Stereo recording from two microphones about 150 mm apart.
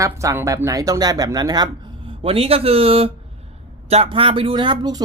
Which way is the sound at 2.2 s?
40° right (ahead or behind).